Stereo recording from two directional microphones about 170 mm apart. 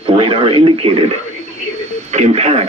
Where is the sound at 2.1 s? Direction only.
40° right (ahead or behind).